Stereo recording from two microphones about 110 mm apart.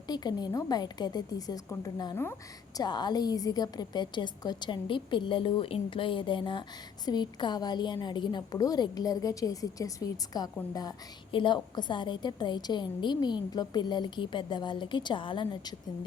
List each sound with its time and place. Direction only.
0.1 s a woman's voice: 40° left (ahead or behind)
2.7 s a woman's voice: 40° left (ahead or behind)
11.3 s a woman's voice: 50° left (ahead or behind)